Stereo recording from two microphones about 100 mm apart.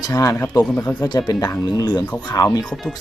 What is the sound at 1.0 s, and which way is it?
Speech, 40° left (ahead or behind).